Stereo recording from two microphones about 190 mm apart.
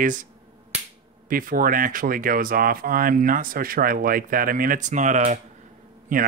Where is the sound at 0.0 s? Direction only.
45° right (ahead or behind).